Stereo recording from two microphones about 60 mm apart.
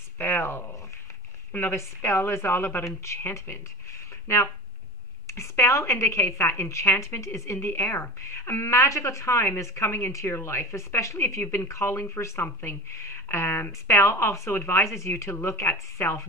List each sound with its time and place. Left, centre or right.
0.2 s a woman's voice: left